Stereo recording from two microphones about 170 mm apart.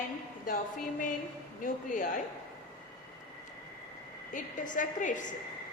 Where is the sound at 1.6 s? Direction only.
50° left (ahead or behind).